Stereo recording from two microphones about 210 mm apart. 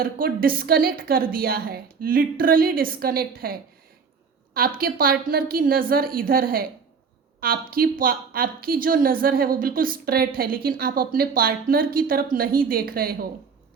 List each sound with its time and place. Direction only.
0.0 s speech: 45° right (ahead or behind)
4.8 s speech: 45° right (ahead or behind)